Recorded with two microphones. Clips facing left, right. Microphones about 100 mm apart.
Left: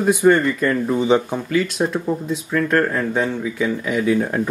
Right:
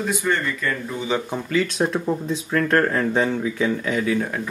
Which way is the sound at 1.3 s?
10° left (ahead or behind).